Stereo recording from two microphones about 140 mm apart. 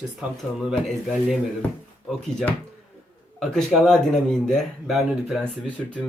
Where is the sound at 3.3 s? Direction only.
Centre (ahead or behind).